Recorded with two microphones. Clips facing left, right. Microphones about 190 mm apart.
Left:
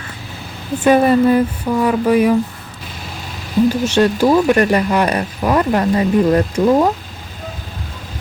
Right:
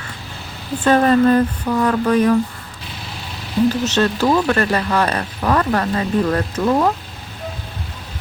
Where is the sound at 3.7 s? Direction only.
10° left (ahead or behind).